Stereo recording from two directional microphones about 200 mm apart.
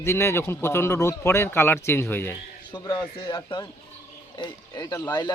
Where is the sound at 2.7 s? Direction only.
20° left (ahead or behind).